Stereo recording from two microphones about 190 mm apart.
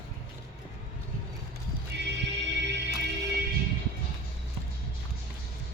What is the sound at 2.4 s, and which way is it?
Music, 65° right (ahead or behind).